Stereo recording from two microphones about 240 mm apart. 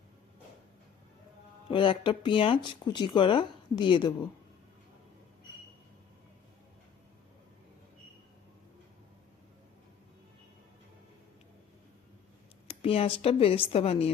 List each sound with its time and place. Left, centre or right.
1.7 s speech: left
12.6 s speech: left